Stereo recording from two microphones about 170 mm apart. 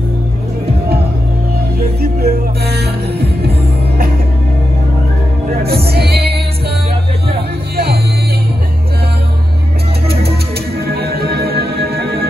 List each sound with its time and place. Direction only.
1.8 s music: 65° right (ahead or behind)
5.7 s music: 70° right (ahead or behind)
7.7 s music: 65° right (ahead or behind)
10.8 s music: 70° right (ahead or behind)